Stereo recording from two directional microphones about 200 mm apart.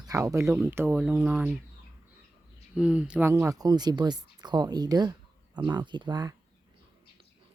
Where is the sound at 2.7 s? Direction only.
5° right (ahead or behind); by 6.3 s 20° right (ahead or behind).